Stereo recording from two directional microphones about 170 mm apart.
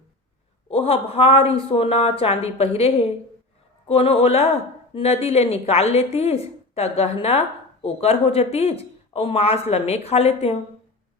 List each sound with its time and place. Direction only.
0.7 s a woman's voice: 35° left (ahead or behind)